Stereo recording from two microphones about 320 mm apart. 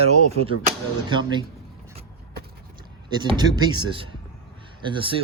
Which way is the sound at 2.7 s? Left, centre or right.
Centre.